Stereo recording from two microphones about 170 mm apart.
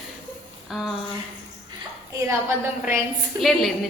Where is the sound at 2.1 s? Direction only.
15° right (ahead or behind).